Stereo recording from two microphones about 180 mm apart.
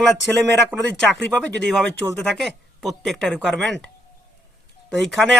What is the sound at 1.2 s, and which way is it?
Speech, 5° left (ahead or behind).